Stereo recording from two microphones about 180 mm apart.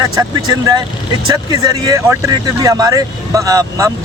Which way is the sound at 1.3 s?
20° right (ahead or behind).